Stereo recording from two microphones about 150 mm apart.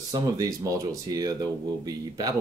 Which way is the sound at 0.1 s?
25° right (ahead or behind).